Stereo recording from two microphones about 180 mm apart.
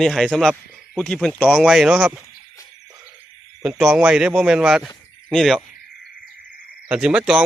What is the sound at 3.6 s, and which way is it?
Speech, 10° right (ahead or behind).